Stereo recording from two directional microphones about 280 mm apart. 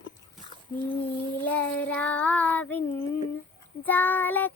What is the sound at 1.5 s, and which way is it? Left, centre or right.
Child singing, centre.